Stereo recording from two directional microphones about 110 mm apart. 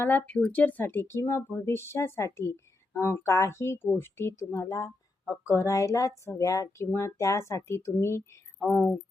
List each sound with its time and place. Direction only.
0.0 s a woman's voice: 15° left (ahead or behind)